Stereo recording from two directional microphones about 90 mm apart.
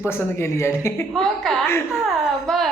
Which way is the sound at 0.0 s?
30° left (ahead or behind).